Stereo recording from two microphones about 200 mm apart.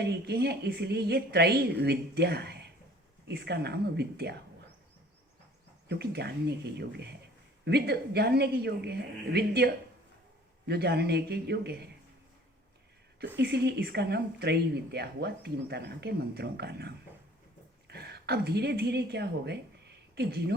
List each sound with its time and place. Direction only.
0.0 s a woman's voice: 55° right (ahead or behind)
5.9 s a woman's voice: 55° right (ahead or behind)
13.1 s a woman's voice: 55° right (ahead or behind)